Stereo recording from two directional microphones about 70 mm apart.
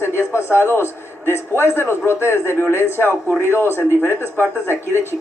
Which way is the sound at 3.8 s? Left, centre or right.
Left.